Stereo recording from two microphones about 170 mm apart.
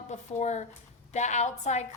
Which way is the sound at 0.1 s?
45° left (ahead or behind).